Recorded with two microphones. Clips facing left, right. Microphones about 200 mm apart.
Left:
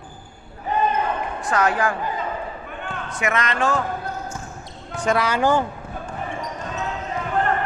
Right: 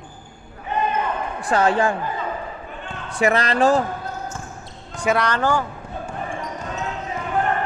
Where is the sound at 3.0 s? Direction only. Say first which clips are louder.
Right 5 dB; 35° right (ahead or behind).